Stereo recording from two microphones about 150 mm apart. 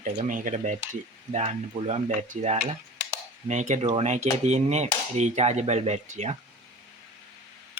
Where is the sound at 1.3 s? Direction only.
45° right (ahead or behind).